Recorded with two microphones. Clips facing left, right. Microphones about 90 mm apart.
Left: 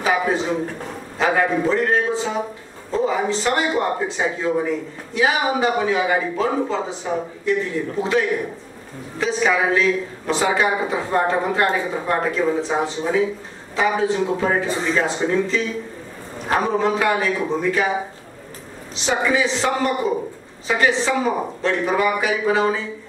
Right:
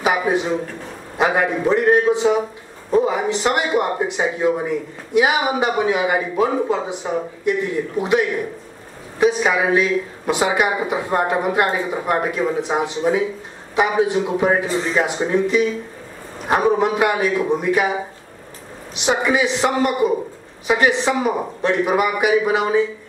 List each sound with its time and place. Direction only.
0.0 s a man's voice: 15° right (ahead or behind)
19.0 s a man's voice: 15° right (ahead or behind)